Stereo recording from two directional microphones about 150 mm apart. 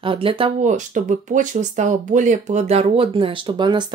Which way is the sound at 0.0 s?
35° right (ahead or behind).